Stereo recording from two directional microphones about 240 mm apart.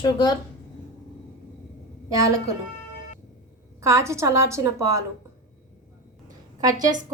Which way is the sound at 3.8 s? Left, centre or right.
Centre.